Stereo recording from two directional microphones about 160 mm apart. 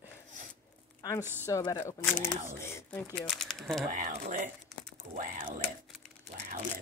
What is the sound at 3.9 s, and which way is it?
Speech, 55° right (ahead or behind).